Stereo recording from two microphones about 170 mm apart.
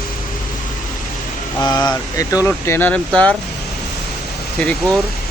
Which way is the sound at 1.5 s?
25° left (ahead or behind).